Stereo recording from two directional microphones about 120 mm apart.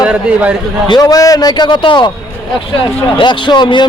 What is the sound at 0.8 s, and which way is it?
A man's voice, 35° left (ahead or behind).